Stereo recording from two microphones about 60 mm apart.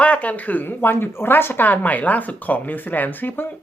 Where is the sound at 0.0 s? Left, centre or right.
Left.